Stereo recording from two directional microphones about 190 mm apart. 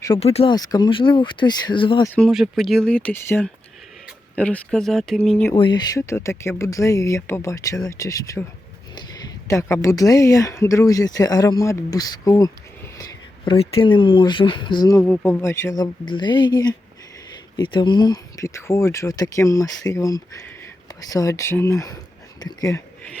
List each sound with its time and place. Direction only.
0.2 s speech: 30° left (ahead or behind)
0.5 s speech: 20° left (ahead or behind)
2.1 s speech: centre (ahead or behind)
5.5 s speech: 25° left (ahead or behind)